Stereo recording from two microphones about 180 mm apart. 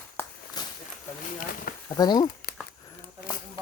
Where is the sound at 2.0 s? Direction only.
25° left (ahead or behind).